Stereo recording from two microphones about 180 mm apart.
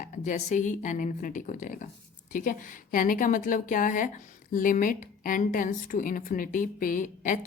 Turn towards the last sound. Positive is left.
turn(degrees=45)  # may be behind; listen again after turning